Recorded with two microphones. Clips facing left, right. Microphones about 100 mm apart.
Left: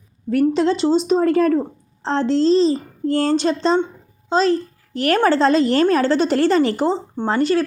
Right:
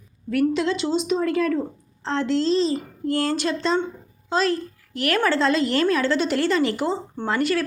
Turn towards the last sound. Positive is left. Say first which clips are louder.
# left 5 dB
turn(degrees=30)  # may be behind; listen again after turning